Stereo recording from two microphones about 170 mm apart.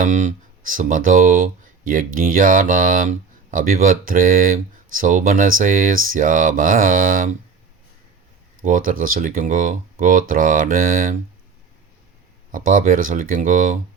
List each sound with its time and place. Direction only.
0.0 s speech: 50° right (ahead or behind)
8.6 s speech: 55° right (ahead or behind)
12.5 s speech: 55° right (ahead or behind)